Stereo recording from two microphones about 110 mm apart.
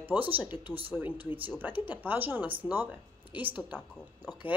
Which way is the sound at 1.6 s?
15° right (ahead or behind).